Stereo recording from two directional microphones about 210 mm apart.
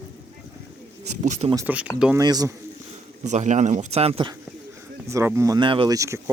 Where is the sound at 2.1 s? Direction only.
15° right (ahead or behind).